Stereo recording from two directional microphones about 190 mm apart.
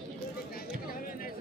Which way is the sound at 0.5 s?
50° left (ahead or behind).